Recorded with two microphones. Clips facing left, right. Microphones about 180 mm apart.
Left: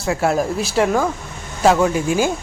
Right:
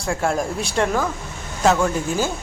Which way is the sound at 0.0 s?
5° left (ahead or behind).